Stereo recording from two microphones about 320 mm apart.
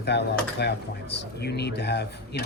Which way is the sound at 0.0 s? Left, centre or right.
Left.